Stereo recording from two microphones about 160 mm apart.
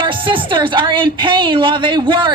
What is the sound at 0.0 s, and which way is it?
A man's voice, 30° right (ahead or behind).